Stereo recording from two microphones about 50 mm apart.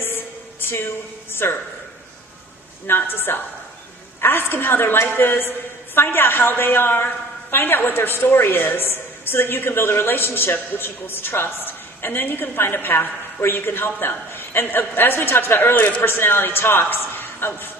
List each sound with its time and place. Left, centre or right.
0.0 s a sound: left
2.9 s a woman's voice: left
15.7 s speech: left
16.0 s a woman's voice: left